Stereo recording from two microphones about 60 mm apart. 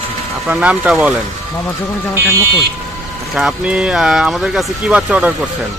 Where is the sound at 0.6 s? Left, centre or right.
Right.